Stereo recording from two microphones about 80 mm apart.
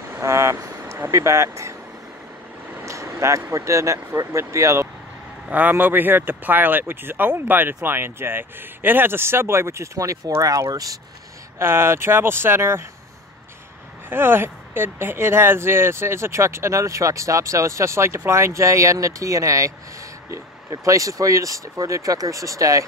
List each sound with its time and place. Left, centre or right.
0.1 s vehicle: right
1.1 s speech: right
2.8 s speech: right
5.5 s speech: right
11.5 s speech: right
14.0 s speech: right